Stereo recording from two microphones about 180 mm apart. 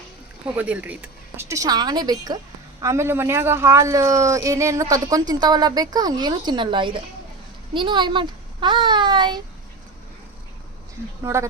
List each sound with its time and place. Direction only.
0.4 s a child's voice: 10° right (ahead or behind); by 9.4 s 25° right (ahead or behind)
11.2 s speech: 15° right (ahead or behind)